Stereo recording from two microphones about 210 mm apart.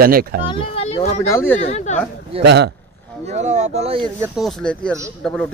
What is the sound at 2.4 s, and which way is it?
Speech, 55° right (ahead or behind).